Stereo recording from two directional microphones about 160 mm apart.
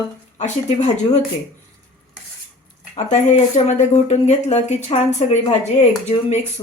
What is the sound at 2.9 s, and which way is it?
A woman's voice, 45° left (ahead or behind).